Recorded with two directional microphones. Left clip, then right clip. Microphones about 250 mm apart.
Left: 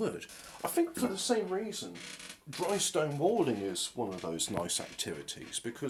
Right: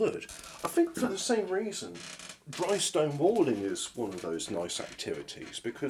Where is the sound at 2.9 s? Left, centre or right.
Centre.